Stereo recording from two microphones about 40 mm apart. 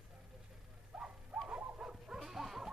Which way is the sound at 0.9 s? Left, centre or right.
Centre.